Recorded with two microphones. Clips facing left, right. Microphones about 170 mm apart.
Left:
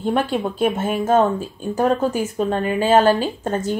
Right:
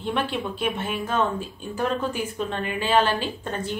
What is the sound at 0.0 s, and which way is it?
Speech, 40° left (ahead or behind).